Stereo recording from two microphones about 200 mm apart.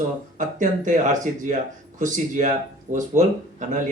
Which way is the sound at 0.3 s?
40° right (ahead or behind).